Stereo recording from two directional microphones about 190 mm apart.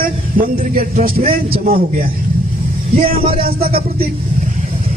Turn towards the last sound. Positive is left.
turn(degrees=-50)  # may be behind; listen again after turning